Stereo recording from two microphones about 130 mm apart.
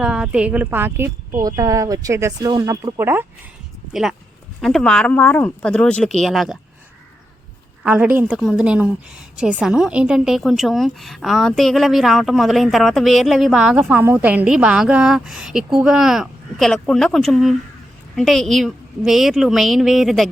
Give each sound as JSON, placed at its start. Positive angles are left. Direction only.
{"t": 0.0, "sound": "a woman's voice", "side_deg": -5}
{"t": 4.6, "sound": "speech", "side_deg": 5}
{"t": 7.9, "sound": "a woman's voice", "side_deg": -10}